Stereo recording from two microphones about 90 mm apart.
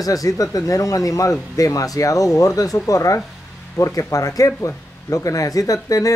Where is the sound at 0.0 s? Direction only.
40° left (ahead or behind).